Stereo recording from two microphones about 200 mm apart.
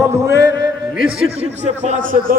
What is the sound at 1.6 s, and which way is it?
Speech, 35° right (ahead or behind).